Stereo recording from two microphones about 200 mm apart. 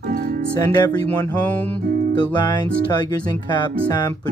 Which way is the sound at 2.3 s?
20° left (ahead or behind).